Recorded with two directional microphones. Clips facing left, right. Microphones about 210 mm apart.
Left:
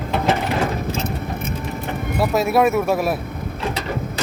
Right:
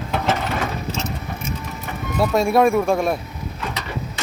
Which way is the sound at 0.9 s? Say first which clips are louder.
Left 3 dB; 55° left (ahead or behind).